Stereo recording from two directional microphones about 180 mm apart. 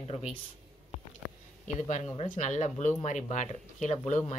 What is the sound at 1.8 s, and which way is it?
Speech, 40° left (ahead or behind).